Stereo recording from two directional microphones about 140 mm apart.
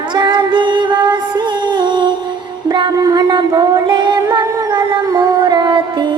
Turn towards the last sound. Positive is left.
turn(degrees=-35)  # may be behind; listen again after turning